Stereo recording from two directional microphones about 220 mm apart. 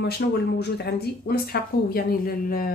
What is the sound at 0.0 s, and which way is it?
Speech, 50° left (ahead or behind).